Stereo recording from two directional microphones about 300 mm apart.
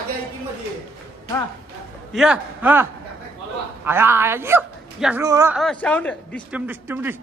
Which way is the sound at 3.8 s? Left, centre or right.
Centre.